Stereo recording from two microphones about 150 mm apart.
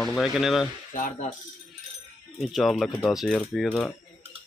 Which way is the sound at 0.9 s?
55° left (ahead or behind).